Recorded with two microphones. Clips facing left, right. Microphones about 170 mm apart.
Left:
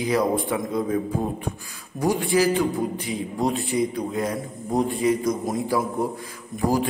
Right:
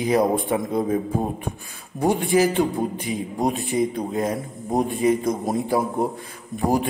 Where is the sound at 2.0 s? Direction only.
20° right (ahead or behind).